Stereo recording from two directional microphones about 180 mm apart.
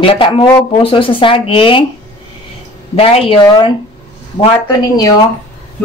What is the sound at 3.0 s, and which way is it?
Speech, 30° left (ahead or behind).